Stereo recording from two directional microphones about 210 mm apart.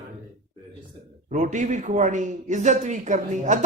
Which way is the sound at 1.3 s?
35° right (ahead or behind).